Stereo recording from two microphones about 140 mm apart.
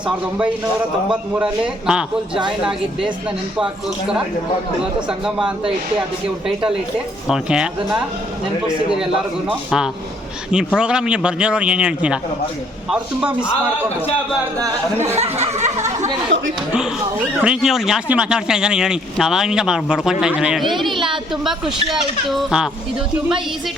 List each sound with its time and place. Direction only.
0.3 s a man's voice: 10° right (ahead or behind)
5.0 s speech: 5° right (ahead or behind)
7.3 s speech: 5° right (ahead or behind)
9.6 s a man's voice: 5° right (ahead or behind)
15.0 s a sound: 50° right (ahead or behind)
17.4 s speech: 5° right (ahead or behind)
20.9 s a sound: 35° right (ahead or behind)
22.3 s speech: centre (ahead or behind)